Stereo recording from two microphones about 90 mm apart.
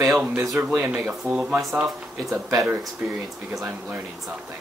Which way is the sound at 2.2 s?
35° right (ahead or behind).